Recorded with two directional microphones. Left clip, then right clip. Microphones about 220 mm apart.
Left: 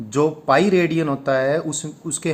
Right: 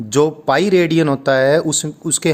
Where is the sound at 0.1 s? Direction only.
45° right (ahead or behind).